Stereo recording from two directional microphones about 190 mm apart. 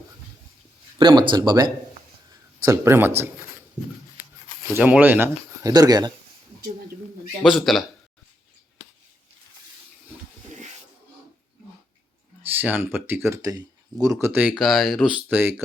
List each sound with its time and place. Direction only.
0.9 s speech: 25° right (ahead or behind)
4.7 s speech: 10° right (ahead or behind)
7.4 s a man's voice: centre (ahead or behind)
12.5 s speech: 10° right (ahead or behind)